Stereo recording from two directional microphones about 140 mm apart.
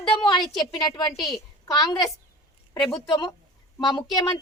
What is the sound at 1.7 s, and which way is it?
Speech, 30° left (ahead or behind).